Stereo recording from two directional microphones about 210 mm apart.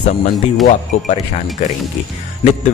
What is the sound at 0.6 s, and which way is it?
Speech, 35° left (ahead or behind).